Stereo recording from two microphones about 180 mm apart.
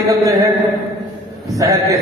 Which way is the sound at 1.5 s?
15° right (ahead or behind).